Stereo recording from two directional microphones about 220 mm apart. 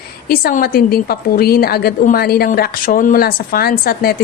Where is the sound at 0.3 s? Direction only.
40° left (ahead or behind).